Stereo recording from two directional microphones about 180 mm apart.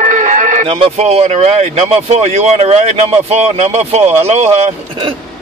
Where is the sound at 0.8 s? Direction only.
35° right (ahead or behind).